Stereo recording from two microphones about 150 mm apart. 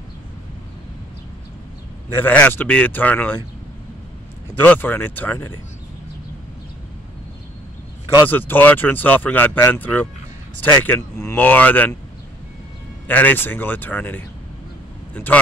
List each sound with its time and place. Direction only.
2.2 s speech: 10° left (ahead or behind)
4.6 s speech: 10° left (ahead or behind)
8.3 s speech: 10° left (ahead or behind)
13.0 s speech: 10° left (ahead or behind)